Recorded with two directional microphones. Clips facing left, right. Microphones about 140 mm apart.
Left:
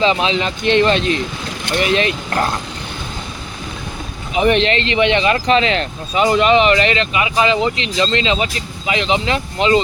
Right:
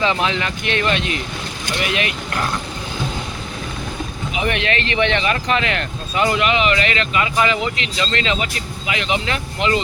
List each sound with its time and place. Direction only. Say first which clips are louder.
0.0 s speech: left 4 dB; 20° left (ahead or behind); by 2.5 s 35° left (ahead or behind)
4.4 s speech: left 7 dB; 30° left (ahead or behind)
6.3 s speech: left 8 dB; 35° left (ahead or behind)